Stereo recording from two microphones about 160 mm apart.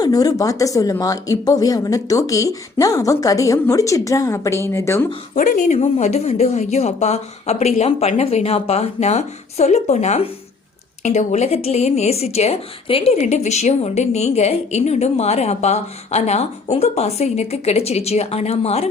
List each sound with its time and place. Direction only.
0.0 s speech: 25° left (ahead or behind)
5.3 s a woman's voice: 50° left (ahead or behind)